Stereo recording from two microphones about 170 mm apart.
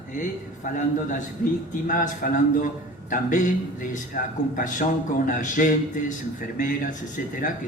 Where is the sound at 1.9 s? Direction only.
50° left (ahead or behind).